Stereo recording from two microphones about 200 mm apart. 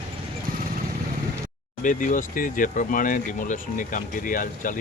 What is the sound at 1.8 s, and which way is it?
Speech, 40° left (ahead or behind).